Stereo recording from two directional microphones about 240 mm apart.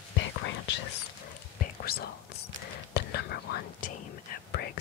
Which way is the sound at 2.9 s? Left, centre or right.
Left.